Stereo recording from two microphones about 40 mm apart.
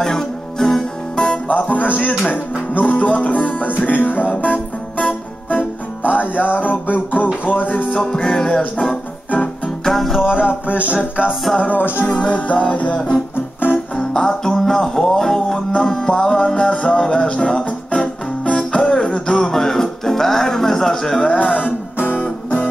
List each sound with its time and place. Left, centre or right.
0.0 s music: centre
1.5 s music: left
2.8 s music: left
7.9 s music: left
9.8 s music: centre
10.2 s music: right
12.1 s music: left
14.1 s music: centre
21.3 s music: left
22.2 s music: left